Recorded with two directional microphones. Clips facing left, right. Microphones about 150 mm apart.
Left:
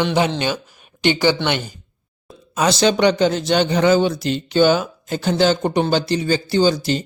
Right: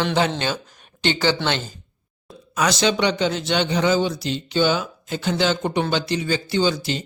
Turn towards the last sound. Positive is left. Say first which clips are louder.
# left 5 dB
turn(degrees=40)  # may be behind; listen again after turning